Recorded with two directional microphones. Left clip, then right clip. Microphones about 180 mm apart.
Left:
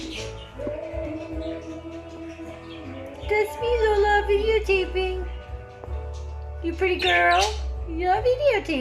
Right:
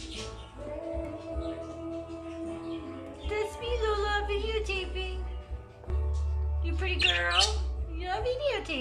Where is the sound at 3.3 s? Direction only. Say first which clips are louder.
Left 10 dB; 35° left (ahead or behind).